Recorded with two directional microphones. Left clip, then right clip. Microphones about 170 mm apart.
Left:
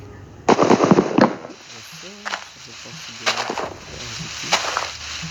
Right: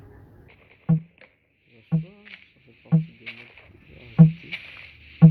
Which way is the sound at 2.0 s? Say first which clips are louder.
Left 16 dB; 55° left (ahead or behind).